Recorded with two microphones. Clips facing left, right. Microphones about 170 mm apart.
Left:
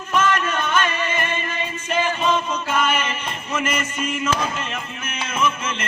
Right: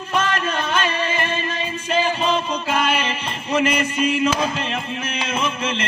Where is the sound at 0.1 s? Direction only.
35° right (ahead or behind).